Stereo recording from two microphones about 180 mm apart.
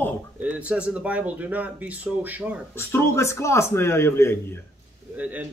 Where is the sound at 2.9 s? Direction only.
15° left (ahead or behind).